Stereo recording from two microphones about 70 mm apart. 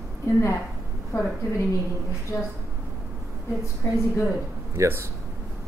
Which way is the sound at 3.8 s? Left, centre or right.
Left.